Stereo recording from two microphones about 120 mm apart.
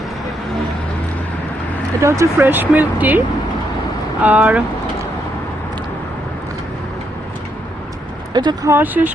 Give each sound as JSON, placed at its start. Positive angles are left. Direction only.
{"t": 2.0, "sound": "speech", "side_deg": -25}
{"t": 8.3, "sound": "speech", "side_deg": -35}
{"t": 8.7, "sound": "speech", "side_deg": -15}